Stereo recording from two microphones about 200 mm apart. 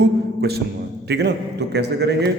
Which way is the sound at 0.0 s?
55° right (ahead or behind).